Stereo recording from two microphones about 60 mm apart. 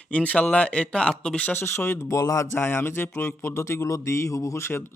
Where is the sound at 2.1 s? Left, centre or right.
Left.